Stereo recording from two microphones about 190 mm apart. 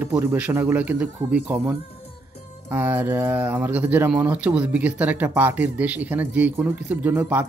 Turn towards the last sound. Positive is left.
turn(degrees=-10)  # may be behind; listen again after turning